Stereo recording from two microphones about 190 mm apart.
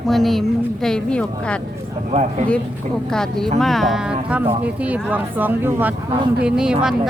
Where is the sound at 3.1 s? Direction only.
5° left (ahead or behind).